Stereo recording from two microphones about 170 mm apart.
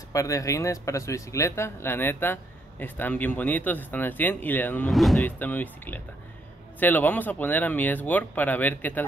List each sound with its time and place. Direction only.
0.1 s speech: 20° left (ahead or behind)
4.8 s speech: centre (ahead or behind)